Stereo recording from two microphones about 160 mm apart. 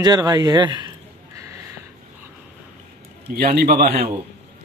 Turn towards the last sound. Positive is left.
turn(degrees=-75)  # may be behind; listen again after turning